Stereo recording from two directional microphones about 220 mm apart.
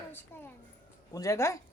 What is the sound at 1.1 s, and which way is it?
Speech, 15° left (ahead or behind).